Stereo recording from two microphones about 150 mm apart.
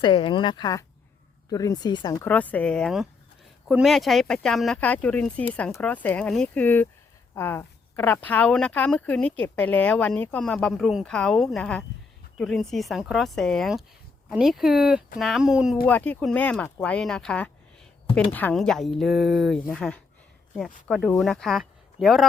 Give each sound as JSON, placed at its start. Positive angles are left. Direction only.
{"t": 0.0, "sound": "speech", "side_deg": 35}
{"t": 2.2, "sound": "speech", "side_deg": 10}
{"t": 15.9, "sound": "speech", "side_deg": 10}